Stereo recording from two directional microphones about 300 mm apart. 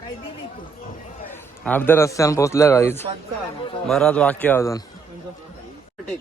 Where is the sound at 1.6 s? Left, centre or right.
Centre.